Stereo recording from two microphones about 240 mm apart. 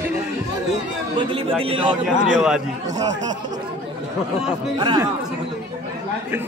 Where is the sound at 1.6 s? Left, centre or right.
Right.